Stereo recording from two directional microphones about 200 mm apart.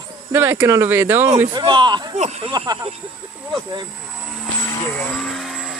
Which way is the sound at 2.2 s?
35° right (ahead or behind).